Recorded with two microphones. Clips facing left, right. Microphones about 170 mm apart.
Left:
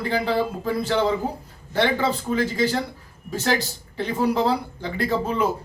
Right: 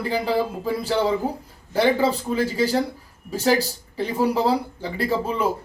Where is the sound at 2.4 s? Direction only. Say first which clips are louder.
Right 1 dB; 35° right (ahead or behind).